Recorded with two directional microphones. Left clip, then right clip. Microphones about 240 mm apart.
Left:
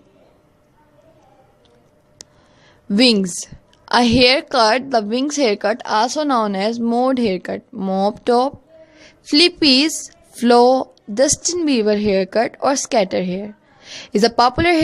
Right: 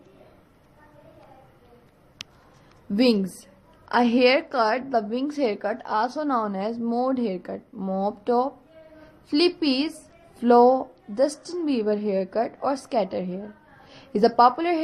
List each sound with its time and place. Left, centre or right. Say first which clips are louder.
2.9 s a woman's voice: left 7 dB; left